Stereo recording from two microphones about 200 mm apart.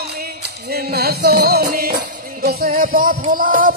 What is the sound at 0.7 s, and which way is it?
Music, 50° right (ahead or behind).